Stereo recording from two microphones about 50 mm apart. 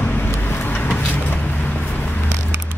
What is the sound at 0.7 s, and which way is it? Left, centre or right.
Vehicle, left.